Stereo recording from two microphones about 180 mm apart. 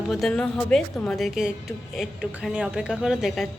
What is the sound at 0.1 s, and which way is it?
A woman's voice, centre (ahead or behind).